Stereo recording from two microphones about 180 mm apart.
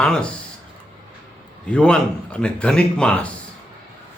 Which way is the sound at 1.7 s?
5° left (ahead or behind).